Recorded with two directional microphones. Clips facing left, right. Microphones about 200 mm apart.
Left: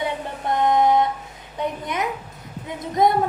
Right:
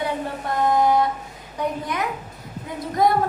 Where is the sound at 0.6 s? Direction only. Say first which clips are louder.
Left 1 dB; 20° left (ahead or behind).